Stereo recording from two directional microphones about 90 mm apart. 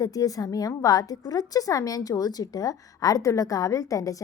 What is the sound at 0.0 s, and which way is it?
A woman's voice, 45° left (ahead or behind).